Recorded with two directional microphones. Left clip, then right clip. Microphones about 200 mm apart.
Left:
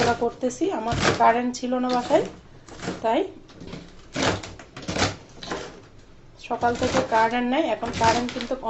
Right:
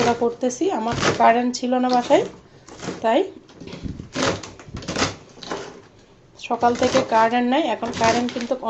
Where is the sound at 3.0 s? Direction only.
25° right (ahead or behind).